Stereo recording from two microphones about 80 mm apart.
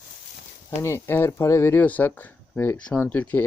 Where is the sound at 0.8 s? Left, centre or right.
Left.